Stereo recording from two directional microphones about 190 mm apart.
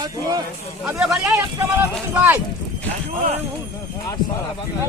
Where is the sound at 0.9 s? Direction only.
Centre (ahead or behind).